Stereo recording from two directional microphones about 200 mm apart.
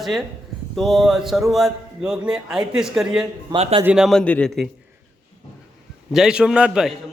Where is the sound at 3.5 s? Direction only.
30° right (ahead or behind).